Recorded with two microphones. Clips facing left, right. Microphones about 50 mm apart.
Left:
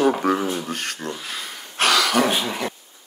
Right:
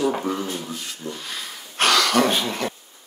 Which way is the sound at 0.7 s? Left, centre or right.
Left.